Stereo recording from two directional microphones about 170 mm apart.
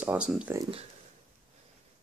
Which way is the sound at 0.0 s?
5° right (ahead or behind).